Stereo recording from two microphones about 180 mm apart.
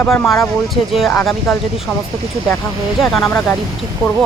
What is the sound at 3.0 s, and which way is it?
Speech, centre (ahead or behind).